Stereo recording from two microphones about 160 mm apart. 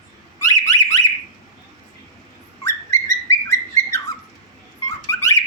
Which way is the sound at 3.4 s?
20° left (ahead or behind).